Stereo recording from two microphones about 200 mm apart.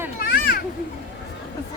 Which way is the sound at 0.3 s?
50° left (ahead or behind).